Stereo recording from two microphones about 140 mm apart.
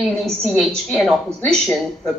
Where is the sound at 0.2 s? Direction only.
Centre (ahead or behind).